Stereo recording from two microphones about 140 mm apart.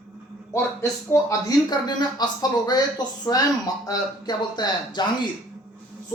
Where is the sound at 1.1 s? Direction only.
25° left (ahead or behind).